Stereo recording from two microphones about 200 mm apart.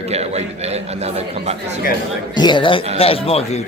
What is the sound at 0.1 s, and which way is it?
Speech, 30° right (ahead or behind).